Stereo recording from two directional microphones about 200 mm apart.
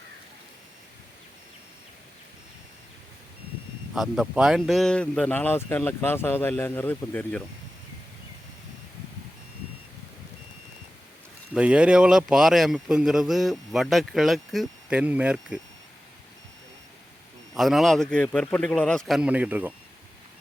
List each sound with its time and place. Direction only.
3.9 s speech: centre (ahead or behind)
11.5 s speech: 5° right (ahead or behind)
17.5 s speech: centre (ahead or behind)